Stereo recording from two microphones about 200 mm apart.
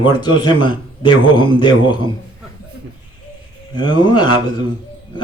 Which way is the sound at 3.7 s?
20° left (ahead or behind).